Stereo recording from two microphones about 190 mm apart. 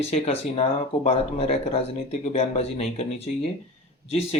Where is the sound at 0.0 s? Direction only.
35° left (ahead or behind).